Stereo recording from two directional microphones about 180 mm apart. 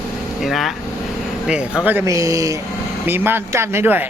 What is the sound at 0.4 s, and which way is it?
A woman's voice, centre (ahead or behind).